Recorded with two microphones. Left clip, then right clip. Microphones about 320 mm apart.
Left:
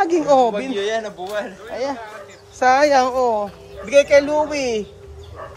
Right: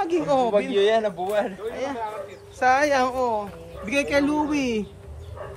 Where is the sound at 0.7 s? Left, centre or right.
Right.